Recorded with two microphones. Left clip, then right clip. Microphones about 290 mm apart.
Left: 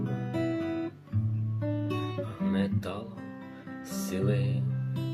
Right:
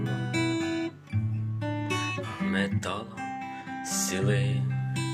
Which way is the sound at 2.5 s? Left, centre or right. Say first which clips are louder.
Right 5 dB; centre.